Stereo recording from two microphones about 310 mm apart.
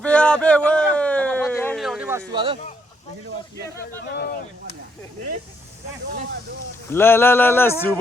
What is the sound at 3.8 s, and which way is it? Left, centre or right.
Speech, left.